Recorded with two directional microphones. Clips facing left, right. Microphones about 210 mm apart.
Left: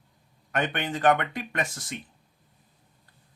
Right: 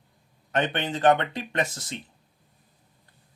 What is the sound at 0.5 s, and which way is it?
A man's voice, 25° right (ahead or behind).